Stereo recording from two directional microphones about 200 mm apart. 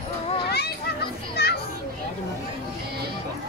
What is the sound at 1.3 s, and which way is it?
Children playing, 55° left (ahead or behind).